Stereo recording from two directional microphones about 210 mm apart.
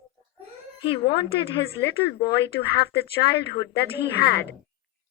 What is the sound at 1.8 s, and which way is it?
Speech, 50° left (ahead or behind).